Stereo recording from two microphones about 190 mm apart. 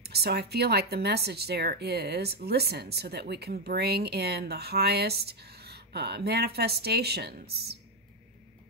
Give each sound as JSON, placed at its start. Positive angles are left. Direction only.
{"t": 0.0, "sound": "speech", "side_deg": -55}